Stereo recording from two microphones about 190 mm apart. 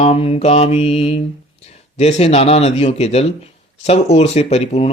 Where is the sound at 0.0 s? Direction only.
30° left (ahead or behind).